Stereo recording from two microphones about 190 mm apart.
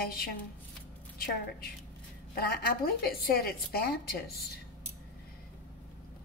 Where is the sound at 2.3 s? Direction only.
55° left (ahead or behind).